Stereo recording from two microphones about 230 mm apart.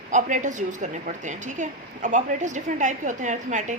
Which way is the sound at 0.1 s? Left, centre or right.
Right.